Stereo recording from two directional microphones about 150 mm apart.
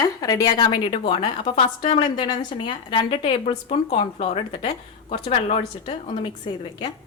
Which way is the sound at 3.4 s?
45° left (ahead or behind).